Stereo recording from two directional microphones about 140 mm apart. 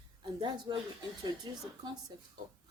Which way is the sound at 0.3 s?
35° right (ahead or behind).